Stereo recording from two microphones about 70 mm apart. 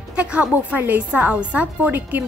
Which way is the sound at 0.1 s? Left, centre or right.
Centre.